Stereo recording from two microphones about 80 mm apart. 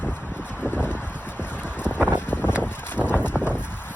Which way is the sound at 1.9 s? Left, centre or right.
Centre.